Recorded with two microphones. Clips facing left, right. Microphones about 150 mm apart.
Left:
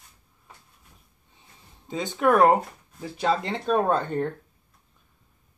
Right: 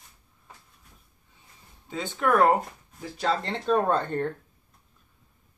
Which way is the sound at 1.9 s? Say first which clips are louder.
Left 3 dB; 20° left (ahead or behind).